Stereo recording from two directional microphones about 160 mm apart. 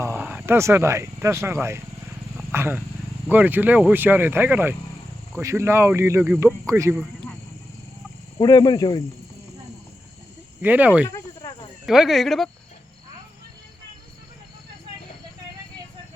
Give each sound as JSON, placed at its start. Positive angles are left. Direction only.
{"t": 0.0, "sound": "speech", "side_deg": -15}
{"t": 8.4, "sound": "speech", "side_deg": 25}
{"t": 10.6, "sound": "speech", "side_deg": -10}
{"t": 11.3, "sound": "snake", "side_deg": 30}
{"t": 11.9, "sound": "speech", "side_deg": 0}